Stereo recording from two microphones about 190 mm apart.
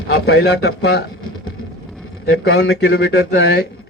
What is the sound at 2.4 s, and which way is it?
Speech, 60° left (ahead or behind).